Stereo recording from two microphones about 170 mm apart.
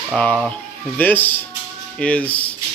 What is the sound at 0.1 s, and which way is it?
Speech, 5° left (ahead or behind).